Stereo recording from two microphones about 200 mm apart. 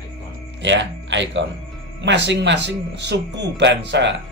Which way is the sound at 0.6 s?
65° right (ahead or behind).